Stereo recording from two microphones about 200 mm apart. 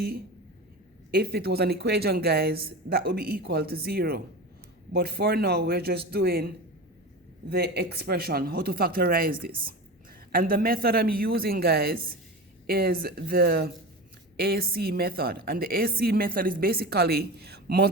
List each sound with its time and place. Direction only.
1.1 s a woman's voice: 55° right (ahead or behind)
7.5 s a woman's voice: 55° right (ahead or behind)